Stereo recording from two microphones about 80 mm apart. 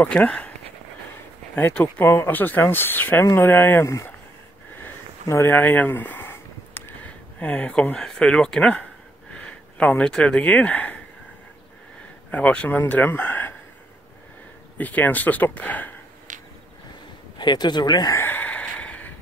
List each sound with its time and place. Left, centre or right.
0.0 s speech: centre
1.7 s speech: centre
2.0 s speech: left
3.8 s speech: left
5.3 s a sound: left
7.3 s speech: centre
12.3 s speech: centre
14.8 s speech: left
17.4 s speech: left
18.1 s a sound: left